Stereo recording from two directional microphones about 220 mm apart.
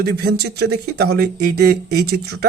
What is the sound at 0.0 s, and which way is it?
Speech, 45° right (ahead or behind).